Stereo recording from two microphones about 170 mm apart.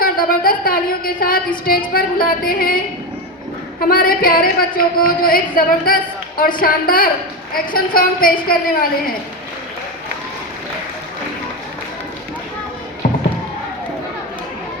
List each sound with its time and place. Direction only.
0.0 s speech: 55° left (ahead or behind)
3.8 s speech: 60° left (ahead or behind)